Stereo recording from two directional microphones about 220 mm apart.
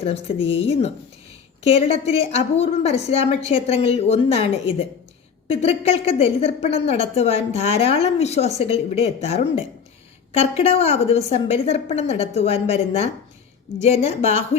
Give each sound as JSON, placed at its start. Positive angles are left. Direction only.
{"t": 0.0, "sound": "a woman's voice", "side_deg": 25}